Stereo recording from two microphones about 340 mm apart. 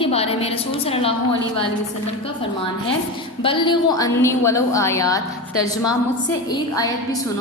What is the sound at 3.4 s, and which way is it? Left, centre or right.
A woman's voice, centre.